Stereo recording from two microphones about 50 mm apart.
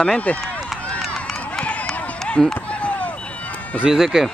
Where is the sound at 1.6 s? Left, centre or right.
Left.